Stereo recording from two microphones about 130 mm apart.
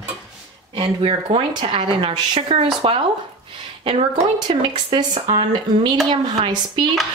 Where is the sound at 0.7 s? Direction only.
40° right (ahead or behind).